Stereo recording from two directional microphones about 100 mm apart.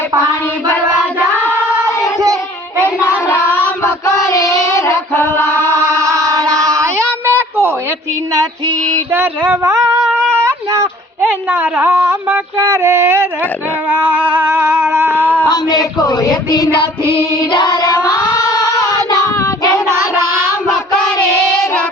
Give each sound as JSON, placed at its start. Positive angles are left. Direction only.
{"t": 3.2, "sound": "child singing", "side_deg": 20}
{"t": 3.8, "sound": "female singing", "side_deg": 30}
{"t": 6.1, "sound": "a sound", "side_deg": -35}
{"t": 9.1, "sound": "a sound", "side_deg": -20}
{"t": 11.3, "sound": "a sound", "side_deg": -20}
{"t": 13.9, "sound": "music", "side_deg": -20}
{"t": 15.4, "sound": "speech", "side_deg": 45}
{"t": 17.7, "sound": "child singing", "side_deg": 35}
{"t": 19.9, "sound": "child singing", "side_deg": -25}